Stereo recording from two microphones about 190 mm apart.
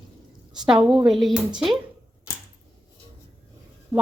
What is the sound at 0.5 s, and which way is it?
Speech, 5° right (ahead or behind).